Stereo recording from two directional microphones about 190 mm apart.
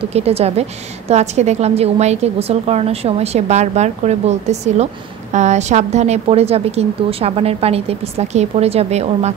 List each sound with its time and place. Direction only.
0.1 s a woman's voice: 35° right (ahead or behind)